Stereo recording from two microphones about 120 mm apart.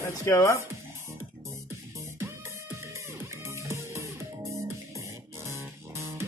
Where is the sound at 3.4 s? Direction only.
25° right (ahead or behind).